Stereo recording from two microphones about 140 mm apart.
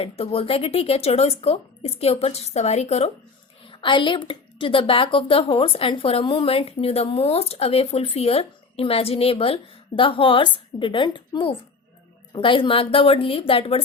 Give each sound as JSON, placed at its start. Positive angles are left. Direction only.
{"t": 0.0, "sound": "speech", "side_deg": 40}
{"t": 3.7, "sound": "a woman's voice", "side_deg": 35}